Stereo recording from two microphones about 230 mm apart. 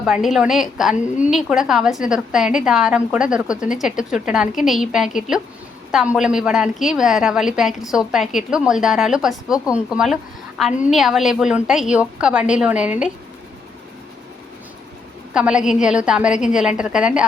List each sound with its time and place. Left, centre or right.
0.0 s a woman's voice: centre
15.3 s a woman's voice: centre